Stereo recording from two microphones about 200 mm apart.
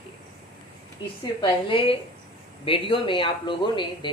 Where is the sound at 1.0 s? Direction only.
20° left (ahead or behind).